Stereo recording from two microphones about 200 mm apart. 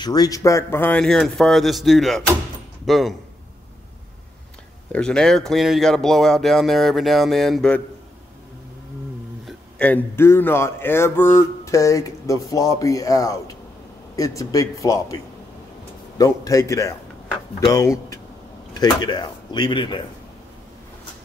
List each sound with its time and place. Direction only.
0.0 s speech: 20° left (ahead or behind); by 3.2 s centre (ahead or behind)
4.9 s speech: 5° left (ahead or behind)
9.5 s speech: 5° left (ahead or behind)
16.2 s speech: 15° left (ahead or behind)